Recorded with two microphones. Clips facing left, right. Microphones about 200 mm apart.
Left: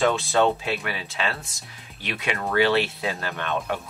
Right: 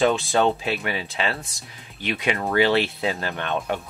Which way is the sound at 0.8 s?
25° right (ahead or behind).